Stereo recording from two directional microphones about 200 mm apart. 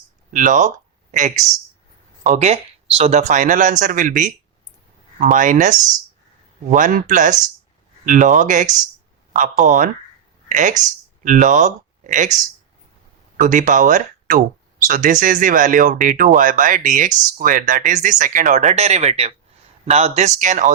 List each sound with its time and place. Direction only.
0.3 s speech: 40° right (ahead or behind)